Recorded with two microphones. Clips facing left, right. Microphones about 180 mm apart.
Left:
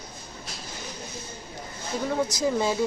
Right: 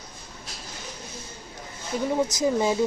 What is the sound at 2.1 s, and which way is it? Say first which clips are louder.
Speech: right 2 dB; 20° right (ahead or behind).